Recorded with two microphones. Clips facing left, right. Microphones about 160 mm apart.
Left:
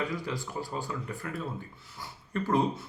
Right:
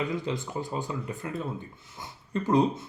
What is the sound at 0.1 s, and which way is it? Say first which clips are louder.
Speech: right 4 dB; 20° right (ahead or behind).